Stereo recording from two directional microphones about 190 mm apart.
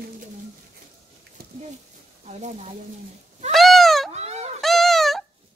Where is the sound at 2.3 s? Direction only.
35° right (ahead or behind).